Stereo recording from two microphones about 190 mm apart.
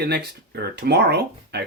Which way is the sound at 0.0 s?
60° right (ahead or behind).